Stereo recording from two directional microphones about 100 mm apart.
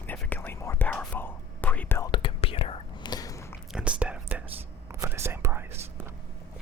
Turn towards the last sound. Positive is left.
turn(degrees=-25)  # may be behind; listen again after turning